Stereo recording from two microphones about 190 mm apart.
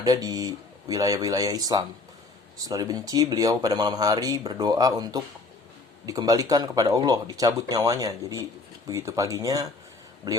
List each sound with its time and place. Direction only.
0.0 s speech: 20° right (ahead or behind)